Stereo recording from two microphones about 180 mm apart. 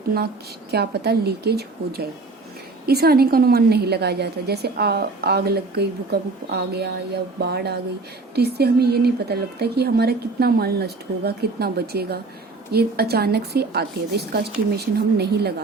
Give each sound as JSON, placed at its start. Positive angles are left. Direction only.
{"t": 0.7, "sound": "a woman's voice", "side_deg": -65}